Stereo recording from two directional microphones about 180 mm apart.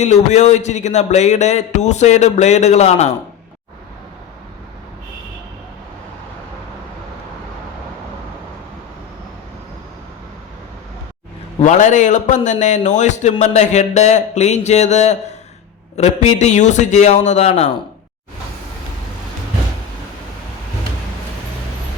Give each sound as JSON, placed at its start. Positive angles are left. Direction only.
{"t": 0.0, "sound": "speech", "side_deg": 40}
{"t": 11.6, "sound": "a man's voice", "side_deg": 40}